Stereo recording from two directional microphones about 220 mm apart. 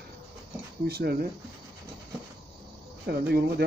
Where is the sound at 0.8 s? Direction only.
45° right (ahead or behind).